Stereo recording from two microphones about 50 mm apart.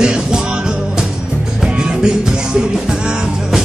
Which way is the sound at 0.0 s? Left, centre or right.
Centre.